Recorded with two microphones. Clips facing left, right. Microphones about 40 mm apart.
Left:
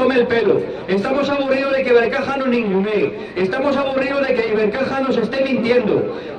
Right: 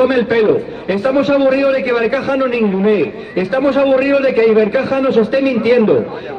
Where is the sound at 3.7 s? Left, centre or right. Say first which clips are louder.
Right 6 dB; right.